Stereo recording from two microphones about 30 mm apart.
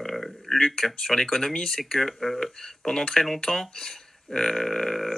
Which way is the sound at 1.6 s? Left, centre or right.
Centre.